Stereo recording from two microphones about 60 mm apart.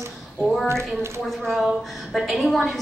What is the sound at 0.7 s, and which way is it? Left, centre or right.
Speech, right.